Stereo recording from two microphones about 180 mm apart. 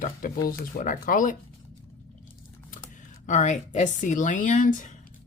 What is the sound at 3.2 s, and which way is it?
Speech, 45° left (ahead or behind).